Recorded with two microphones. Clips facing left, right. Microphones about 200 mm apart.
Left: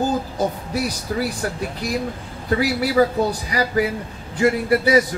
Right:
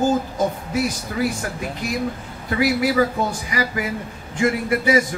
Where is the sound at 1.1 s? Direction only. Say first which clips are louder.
Left 2 dB; 40° left (ahead or behind).